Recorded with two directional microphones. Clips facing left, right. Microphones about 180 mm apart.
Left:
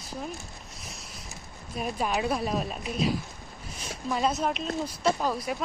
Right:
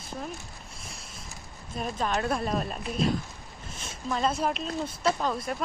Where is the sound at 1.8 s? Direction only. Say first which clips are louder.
Left 1 dB; 5° left (ahead or behind).